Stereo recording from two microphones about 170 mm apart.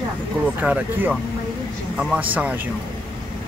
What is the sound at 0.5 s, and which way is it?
Speech, 10° right (ahead or behind).